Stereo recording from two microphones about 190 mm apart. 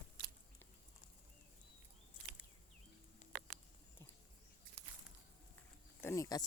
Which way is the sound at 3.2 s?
35° left (ahead or behind).